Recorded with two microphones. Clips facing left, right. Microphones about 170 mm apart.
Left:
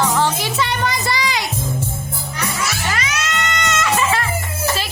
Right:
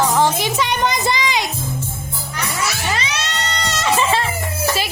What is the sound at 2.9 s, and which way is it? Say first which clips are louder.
Music: even; 30° right (ahead or behind).